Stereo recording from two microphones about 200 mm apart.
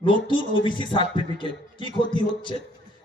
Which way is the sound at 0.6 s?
25° left (ahead or behind).